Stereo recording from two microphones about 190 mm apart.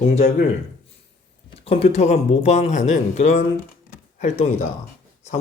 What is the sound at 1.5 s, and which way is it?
Speech, 30° left (ahead or behind).